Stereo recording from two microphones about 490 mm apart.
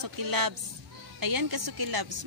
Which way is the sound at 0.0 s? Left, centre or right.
Right.